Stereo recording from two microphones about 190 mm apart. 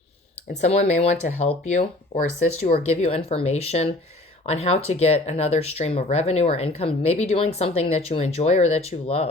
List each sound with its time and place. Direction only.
0.6 s speech: 35° left (ahead or behind)